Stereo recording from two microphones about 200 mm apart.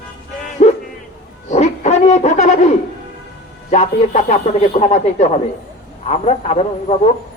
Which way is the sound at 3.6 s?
35° left (ahead or behind).